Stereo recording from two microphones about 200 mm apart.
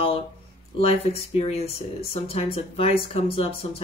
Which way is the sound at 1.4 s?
30° left (ahead or behind).